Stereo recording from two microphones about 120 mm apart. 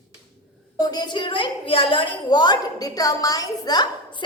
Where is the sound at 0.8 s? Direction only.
35° left (ahead or behind).